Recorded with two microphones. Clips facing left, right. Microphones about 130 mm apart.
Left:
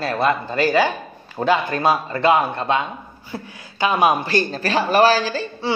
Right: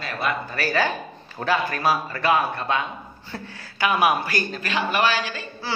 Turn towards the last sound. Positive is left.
turn(degrees=30)  # may be behind; listen again after turning